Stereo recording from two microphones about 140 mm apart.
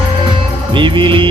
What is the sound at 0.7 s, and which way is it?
Music, 35° right (ahead or behind).